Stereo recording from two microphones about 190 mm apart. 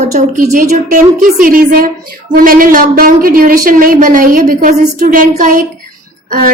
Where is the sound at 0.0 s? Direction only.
40° right (ahead or behind).